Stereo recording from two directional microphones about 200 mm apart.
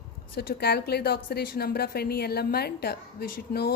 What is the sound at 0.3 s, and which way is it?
A woman's voice, 50° left (ahead or behind).